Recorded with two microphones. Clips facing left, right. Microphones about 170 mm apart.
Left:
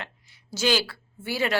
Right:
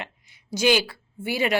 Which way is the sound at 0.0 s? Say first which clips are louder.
Right 2 dB; 15° right (ahead or behind).